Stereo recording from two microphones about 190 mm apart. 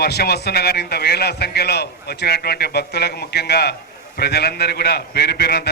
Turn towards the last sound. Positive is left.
turn(degrees=55)  # may be behind; listen again after turning